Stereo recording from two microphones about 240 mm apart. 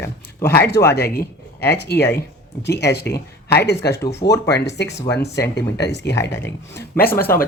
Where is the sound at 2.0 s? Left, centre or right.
Centre.